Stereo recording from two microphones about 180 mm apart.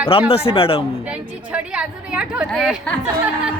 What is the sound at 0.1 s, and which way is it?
Speech, 35° left (ahead or behind).